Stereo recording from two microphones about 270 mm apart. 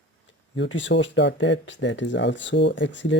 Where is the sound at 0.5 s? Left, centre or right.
Left.